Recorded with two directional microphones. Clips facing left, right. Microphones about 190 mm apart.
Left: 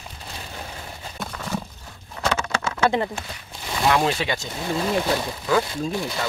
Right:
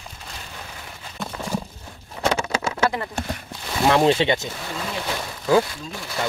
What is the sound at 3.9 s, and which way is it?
Speech, 25° right (ahead or behind).